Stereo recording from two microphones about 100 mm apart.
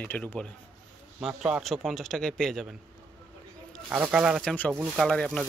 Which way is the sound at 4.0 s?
10° right (ahead or behind).